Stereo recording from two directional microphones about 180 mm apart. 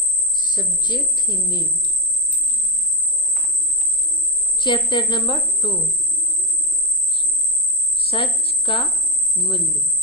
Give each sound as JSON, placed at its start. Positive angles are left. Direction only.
{"t": 0.3, "sound": "speech", "side_deg": 25}
{"t": 4.5, "sound": "speech", "side_deg": 25}
{"t": 7.9, "sound": "cricket", "side_deg": 30}
{"t": 9.4, "sound": "speech", "side_deg": 30}